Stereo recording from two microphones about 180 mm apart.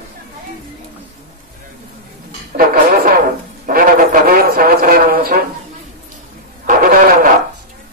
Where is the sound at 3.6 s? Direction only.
50° right (ahead or behind).